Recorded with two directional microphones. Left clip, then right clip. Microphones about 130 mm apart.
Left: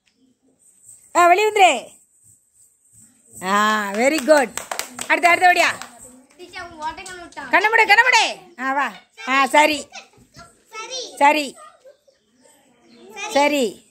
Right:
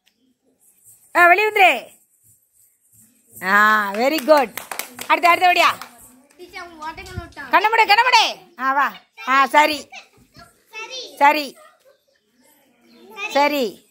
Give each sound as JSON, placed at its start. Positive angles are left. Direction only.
{"t": 1.1, "sound": "speech", "side_deg": 15}
{"t": 3.3, "sound": "speech", "side_deg": 10}
{"t": 5.0, "sound": "a woman's voice", "side_deg": 0}
{"t": 10.7, "sound": "a sound", "side_deg": 45}
{"t": 11.1, "sound": "speech", "side_deg": 5}
{"t": 13.3, "sound": "speech", "side_deg": 0}